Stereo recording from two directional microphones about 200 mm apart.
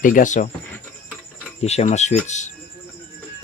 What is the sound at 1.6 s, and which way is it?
Speech, 35° left (ahead or behind).